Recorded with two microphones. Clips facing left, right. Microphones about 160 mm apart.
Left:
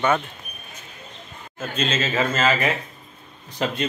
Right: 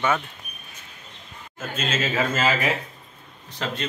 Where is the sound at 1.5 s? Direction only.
5° right (ahead or behind).